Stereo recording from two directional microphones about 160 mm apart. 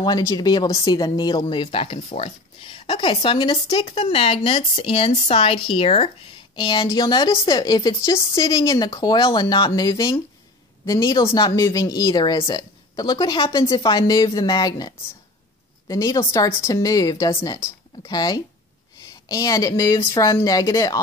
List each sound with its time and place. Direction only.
0.0 s speech: 25° left (ahead or behind)